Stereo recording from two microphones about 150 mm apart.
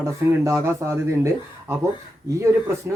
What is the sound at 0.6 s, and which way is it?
Speech, 20° right (ahead or behind).